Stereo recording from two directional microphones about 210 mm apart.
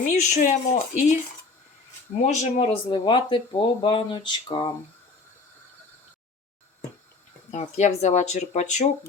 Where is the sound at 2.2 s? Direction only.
35° left (ahead or behind).